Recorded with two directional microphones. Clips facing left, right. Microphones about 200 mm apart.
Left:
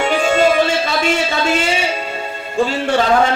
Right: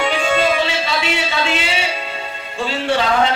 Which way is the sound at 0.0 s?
45° left (ahead or behind).